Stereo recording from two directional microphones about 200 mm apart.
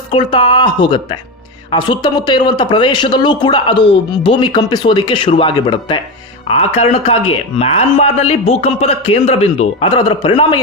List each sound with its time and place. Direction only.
0.1 s speech: 25° left (ahead or behind)